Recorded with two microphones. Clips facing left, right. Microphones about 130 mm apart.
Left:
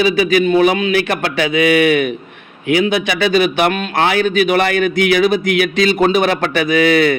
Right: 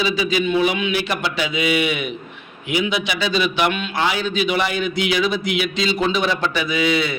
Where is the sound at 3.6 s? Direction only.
45° left (ahead or behind).